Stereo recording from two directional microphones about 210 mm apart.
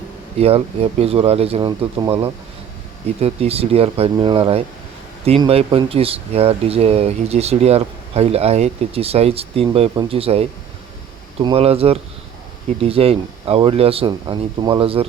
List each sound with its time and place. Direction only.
0.3 s speech: 30° right (ahead or behind)
11.4 s speech: 30° right (ahead or behind)